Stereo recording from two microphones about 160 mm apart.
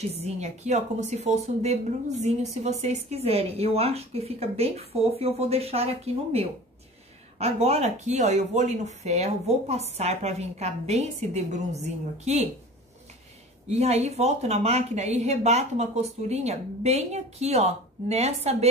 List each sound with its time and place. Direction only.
0.2 s speech: 45° right (ahead or behind)
13.7 s speech: 40° right (ahead or behind)